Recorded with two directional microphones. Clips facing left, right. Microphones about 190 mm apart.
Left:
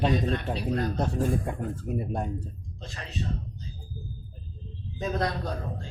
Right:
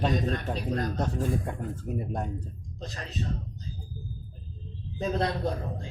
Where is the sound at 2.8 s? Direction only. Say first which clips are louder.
Right 1 dB; 40° right (ahead or behind).